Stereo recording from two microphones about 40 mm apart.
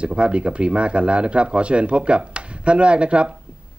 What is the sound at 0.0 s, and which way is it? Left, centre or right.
Speech, right.